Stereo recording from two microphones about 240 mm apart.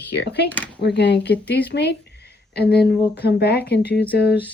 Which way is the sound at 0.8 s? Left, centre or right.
Left.